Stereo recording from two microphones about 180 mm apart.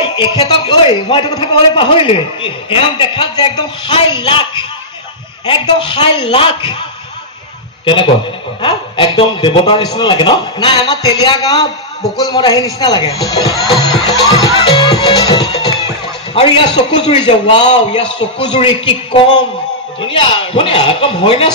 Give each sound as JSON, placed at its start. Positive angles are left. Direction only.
{"t": 0.1, "sound": "a man's voice", "side_deg": 25}
{"t": 7.8, "sound": "a man's voice", "side_deg": 25}
{"t": 20.0, "sound": "a man's voice", "side_deg": 30}